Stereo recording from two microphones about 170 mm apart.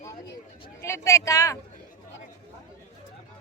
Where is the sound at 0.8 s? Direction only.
15° left (ahead or behind).